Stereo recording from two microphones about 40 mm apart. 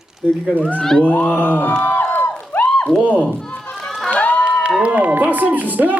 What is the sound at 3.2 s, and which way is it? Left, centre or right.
Speech, centre.